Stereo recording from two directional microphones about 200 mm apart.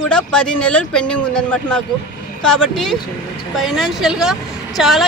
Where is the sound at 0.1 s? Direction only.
5° left (ahead or behind).